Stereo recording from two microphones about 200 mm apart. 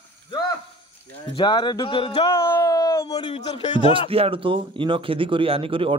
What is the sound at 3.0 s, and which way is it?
Speech, 30° left (ahead or behind).